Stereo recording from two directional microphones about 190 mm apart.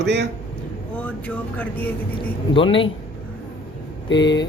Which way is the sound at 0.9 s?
10° left (ahead or behind).